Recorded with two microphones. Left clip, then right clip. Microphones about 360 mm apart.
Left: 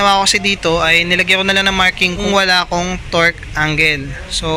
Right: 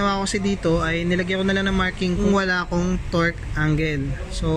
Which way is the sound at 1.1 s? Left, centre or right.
Left.